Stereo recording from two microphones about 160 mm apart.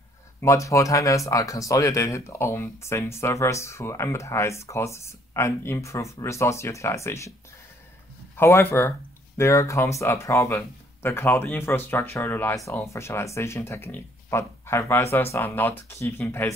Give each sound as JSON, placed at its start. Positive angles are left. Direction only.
{"t": 0.4, "sound": "speech", "side_deg": 20}
{"t": 8.4, "sound": "speech", "side_deg": 15}